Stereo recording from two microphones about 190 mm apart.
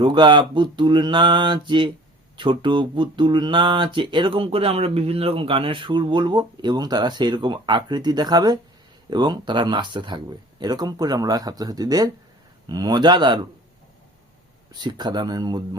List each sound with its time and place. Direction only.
0.0 s speech: 25° right (ahead or behind)
14.7 s speech: 20° right (ahead or behind)